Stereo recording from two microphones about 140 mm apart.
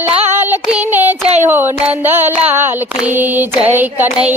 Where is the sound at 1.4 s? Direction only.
15° right (ahead or behind).